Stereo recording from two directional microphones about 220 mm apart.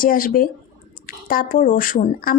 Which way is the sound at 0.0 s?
40° left (ahead or behind).